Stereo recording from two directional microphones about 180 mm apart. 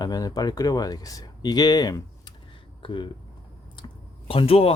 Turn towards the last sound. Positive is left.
turn(degrees=35)  # may be behind; listen again after turning